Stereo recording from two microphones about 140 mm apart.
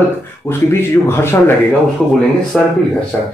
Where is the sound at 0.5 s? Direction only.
15° left (ahead or behind).